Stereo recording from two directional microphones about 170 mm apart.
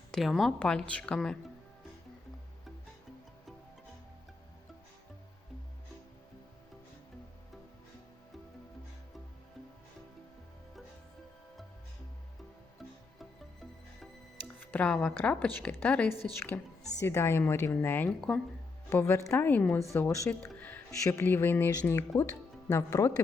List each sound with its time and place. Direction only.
0.1 s speech: centre (ahead or behind)
14.4 s speech: 10° left (ahead or behind)